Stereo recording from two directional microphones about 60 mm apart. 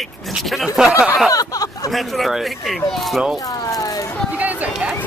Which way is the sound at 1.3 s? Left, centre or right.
Left.